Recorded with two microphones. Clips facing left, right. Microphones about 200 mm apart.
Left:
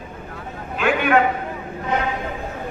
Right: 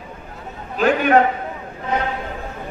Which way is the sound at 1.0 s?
40° right (ahead or behind).